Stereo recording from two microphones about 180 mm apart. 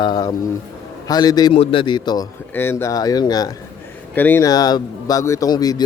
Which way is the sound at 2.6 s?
15° left (ahead or behind).